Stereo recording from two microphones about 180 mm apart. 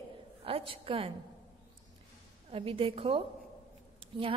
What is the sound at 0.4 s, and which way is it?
Speech, 30° right (ahead or behind).